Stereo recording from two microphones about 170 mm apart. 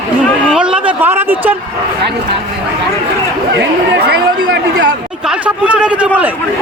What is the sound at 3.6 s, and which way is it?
Speech, 90° right.